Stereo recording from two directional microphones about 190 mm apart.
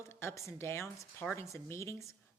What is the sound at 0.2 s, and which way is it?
A woman's voice, 15° left (ahead or behind).